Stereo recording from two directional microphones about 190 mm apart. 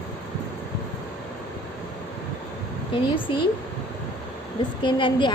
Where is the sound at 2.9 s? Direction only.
25° left (ahead or behind).